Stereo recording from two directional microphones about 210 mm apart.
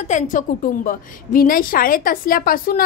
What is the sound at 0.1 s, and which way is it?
A woman's voice, 40° left (ahead or behind).